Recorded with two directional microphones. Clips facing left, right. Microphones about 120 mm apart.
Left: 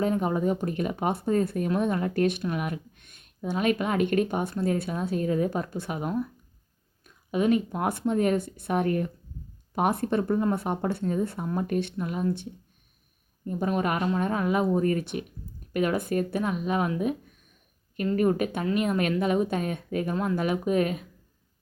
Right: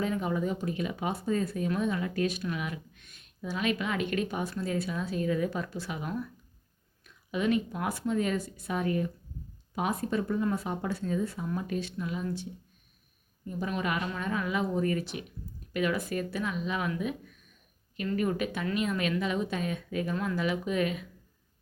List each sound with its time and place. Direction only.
0.0 s a woman's voice: 40° left (ahead or behind); by 2.4 s 55° left (ahead or behind)
2.4 s a woman's voice: 45° left (ahead or behind)
9.7 s speech: 60° left (ahead or behind)
10.2 s a woman's voice: 45° left (ahead or behind)
10.5 s speech: 60° left (ahead or behind)
13.4 s a woman's voice: 45° left (ahead or behind)
18.2 s a woman's voice: 45° left (ahead or behind)